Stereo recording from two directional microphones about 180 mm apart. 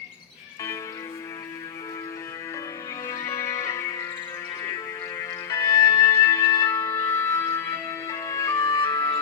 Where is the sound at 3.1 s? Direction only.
15° left (ahead or behind).